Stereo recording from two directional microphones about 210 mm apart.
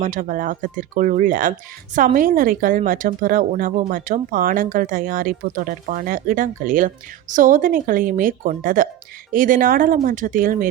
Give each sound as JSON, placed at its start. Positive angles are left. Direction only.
{"t": 0.0, "sound": "speech", "side_deg": -40}